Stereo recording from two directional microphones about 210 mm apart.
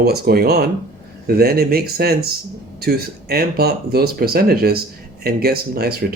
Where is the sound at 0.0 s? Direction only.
50° right (ahead or behind).